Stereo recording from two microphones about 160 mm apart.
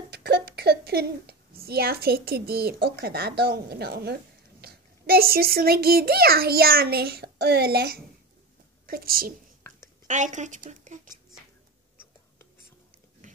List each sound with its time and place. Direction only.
0.1 s a woman's voice: 85° right
8.8 s a woman's voice: 65° right (ahead or behind)
10.0 s speech: 50° right (ahead or behind)